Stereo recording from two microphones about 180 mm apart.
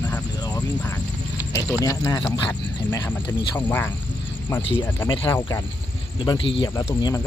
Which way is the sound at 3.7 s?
10° left (ahead or behind).